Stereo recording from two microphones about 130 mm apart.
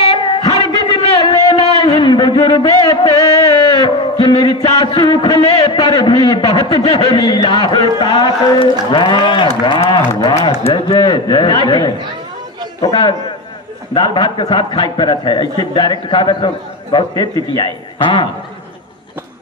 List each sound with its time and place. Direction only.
0.1 s a sound: 35° left (ahead or behind)
4.7 s a man's voice: 35° left (ahead or behind)
7.1 s a man's voice: 30° left (ahead or behind)